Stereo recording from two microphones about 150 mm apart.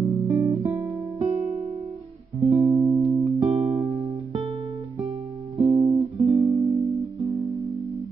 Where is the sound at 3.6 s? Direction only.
45° right (ahead or behind).